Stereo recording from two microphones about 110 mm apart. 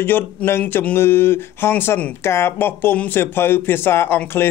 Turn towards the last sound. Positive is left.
turn(degrees=20)  # may be behind; listen again after turning